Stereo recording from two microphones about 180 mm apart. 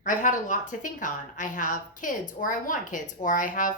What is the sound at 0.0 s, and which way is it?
A woman's voice, 45° left (ahead or behind).